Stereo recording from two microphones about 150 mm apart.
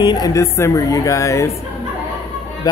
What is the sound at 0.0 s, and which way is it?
A woman's voice, 25° left (ahead or behind).